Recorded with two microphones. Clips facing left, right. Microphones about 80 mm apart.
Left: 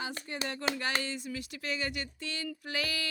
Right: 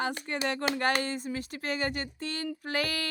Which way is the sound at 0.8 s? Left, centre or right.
Right.